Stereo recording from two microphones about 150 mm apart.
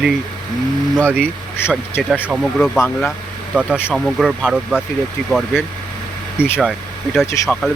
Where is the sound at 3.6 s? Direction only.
5° right (ahead or behind).